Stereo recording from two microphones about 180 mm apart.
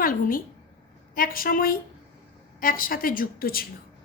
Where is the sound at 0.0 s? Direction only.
50° left (ahead or behind).